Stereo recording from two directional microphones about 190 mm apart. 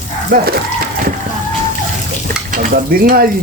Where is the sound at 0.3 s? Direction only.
55° right (ahead or behind).